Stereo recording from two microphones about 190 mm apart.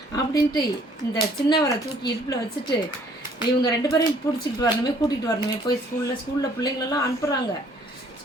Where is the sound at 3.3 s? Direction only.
20° left (ahead or behind).